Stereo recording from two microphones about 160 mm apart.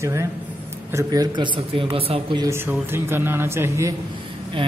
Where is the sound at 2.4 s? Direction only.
15° right (ahead or behind).